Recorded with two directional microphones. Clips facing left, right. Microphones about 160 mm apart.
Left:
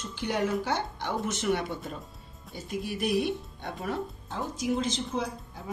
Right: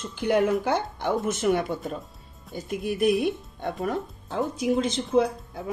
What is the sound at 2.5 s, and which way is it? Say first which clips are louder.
Speech: right 6 dB; centre (ahead or behind).